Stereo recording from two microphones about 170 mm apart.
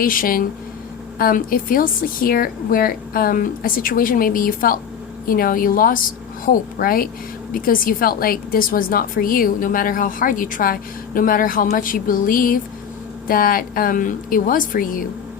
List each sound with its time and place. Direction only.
0.0 s a woman's voice: 55° left (ahead or behind)